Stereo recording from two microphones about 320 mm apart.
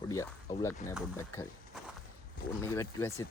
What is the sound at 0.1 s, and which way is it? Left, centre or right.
Speech, centre.